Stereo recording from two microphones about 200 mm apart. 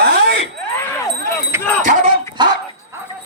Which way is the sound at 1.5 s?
15° right (ahead or behind).